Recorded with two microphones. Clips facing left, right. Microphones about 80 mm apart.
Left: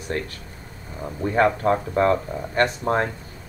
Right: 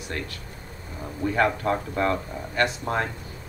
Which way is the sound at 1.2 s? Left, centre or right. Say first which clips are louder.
Left 4 dB; left.